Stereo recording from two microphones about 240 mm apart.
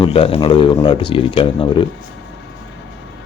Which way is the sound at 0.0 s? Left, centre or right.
Left.